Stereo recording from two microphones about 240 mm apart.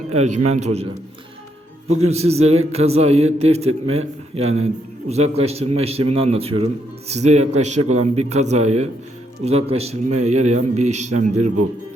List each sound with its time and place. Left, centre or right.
0.1 s a man's voice: right
2.0 s a man's voice: right